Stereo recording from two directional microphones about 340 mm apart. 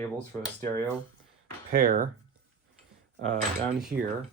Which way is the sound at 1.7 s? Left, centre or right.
Right.